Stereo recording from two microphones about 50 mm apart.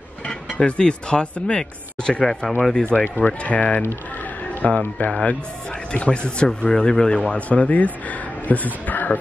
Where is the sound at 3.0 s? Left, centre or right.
Left.